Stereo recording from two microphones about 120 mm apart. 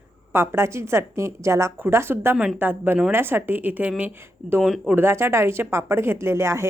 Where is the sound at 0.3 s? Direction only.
20° right (ahead or behind).